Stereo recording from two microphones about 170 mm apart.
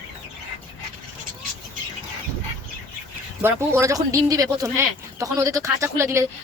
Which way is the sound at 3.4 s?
15° right (ahead or behind).